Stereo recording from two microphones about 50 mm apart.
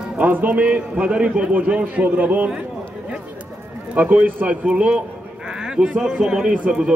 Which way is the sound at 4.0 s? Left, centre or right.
Right.